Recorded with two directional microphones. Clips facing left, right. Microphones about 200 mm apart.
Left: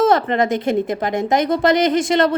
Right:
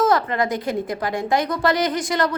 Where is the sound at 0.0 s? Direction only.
25° left (ahead or behind).